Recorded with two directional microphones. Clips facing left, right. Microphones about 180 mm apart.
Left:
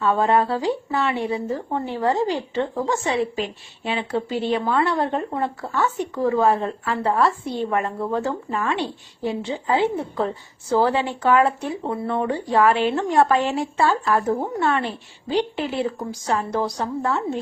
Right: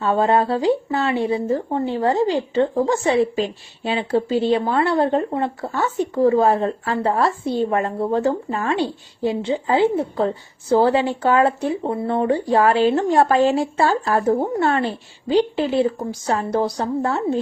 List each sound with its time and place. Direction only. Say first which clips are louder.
0.0 s speech: right 1 dB; 30° right (ahead or behind)